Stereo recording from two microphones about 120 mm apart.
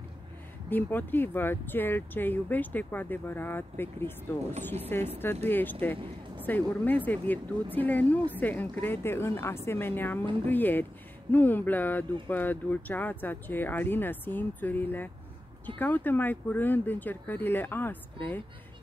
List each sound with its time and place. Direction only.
0.7 s speech: 15° left (ahead or behind)